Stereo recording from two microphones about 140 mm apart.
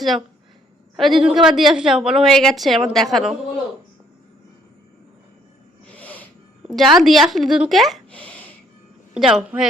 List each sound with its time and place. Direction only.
0.9 s a woman's voice: centre (ahead or behind)
6.0 s music: 10° left (ahead or behind)
6.7 s a woman's voice: centre (ahead or behind)